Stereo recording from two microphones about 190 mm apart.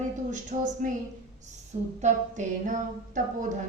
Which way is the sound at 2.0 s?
40° right (ahead or behind).